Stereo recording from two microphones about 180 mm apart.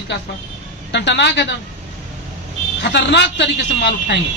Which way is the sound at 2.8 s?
70° left (ahead or behind).